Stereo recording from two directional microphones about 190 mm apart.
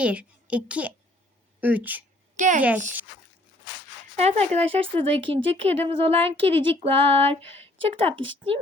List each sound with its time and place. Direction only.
0.0 s a woman's voice: 5° right (ahead or behind)
2.3 s a woman's voice: 40° right (ahead or behind)
4.2 s speech: 35° right (ahead or behind)